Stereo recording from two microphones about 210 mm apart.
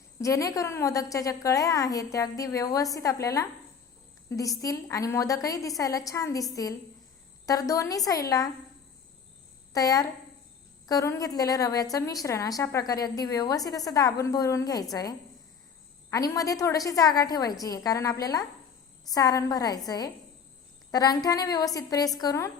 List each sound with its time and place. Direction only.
0.2 s a woman's voice: 15° left (ahead or behind)
9.7 s a woman's voice: 15° left (ahead or behind)